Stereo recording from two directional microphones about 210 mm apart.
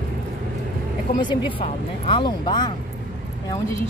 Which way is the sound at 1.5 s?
25° left (ahead or behind).